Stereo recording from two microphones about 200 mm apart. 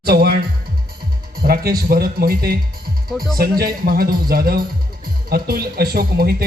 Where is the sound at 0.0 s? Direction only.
50° right (ahead or behind).